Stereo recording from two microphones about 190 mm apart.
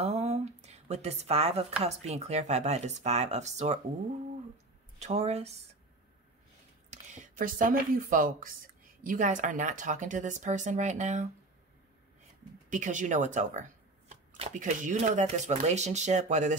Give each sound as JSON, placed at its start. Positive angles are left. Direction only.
{"t": 0.0, "sound": "a sound", "side_deg": -35}
{"t": 1.8, "sound": "speech", "side_deg": -35}
{"t": 4.9, "sound": "speech", "side_deg": -35}
{"t": 6.9, "sound": "speech", "side_deg": -40}
{"t": 12.6, "sound": "speech", "side_deg": -40}